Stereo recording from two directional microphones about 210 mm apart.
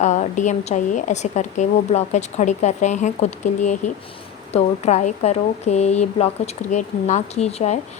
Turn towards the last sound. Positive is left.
turn(degrees=30)  # may be behind; listen again after turning